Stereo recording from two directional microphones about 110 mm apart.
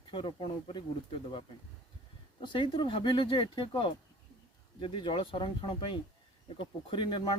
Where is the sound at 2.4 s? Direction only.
50° left (ahead or behind).